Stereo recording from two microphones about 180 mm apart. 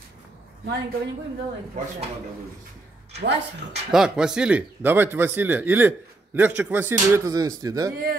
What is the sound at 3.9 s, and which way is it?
A man's voice, 5° right (ahead or behind).